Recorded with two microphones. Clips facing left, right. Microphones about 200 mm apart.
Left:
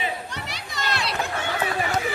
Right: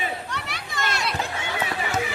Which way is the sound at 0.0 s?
55° right (ahead or behind).